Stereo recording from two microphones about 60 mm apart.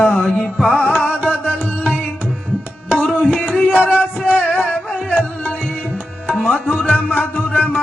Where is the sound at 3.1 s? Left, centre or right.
Left.